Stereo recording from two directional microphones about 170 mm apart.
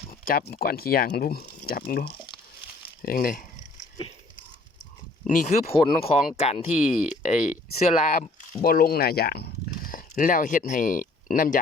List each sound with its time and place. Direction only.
0.1 s speech: 60° left (ahead or behind)
5.2 s speech: 50° left (ahead or behind)
8.6 s speech: 60° left (ahead or behind)